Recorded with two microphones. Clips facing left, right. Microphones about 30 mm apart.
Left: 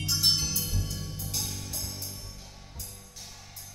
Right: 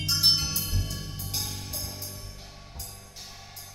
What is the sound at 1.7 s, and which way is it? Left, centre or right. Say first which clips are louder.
Music: right 1 dB; centre.